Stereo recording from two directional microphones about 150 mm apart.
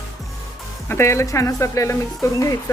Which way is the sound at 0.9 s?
20° left (ahead or behind).